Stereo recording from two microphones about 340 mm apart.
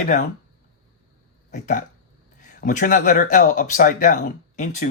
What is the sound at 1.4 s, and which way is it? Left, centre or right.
Speech, left.